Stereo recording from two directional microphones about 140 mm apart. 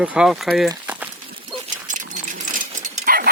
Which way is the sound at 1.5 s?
35° right (ahead or behind).